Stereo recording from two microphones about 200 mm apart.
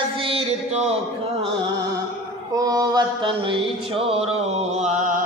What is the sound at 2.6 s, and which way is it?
Mantra, 20° right (ahead or behind).